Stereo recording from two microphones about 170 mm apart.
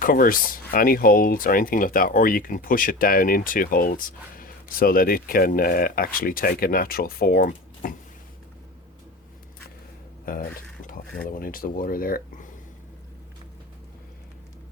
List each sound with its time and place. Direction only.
0.0 s speech: 55° left (ahead or behind)
10.3 s speech: 55° left (ahead or behind)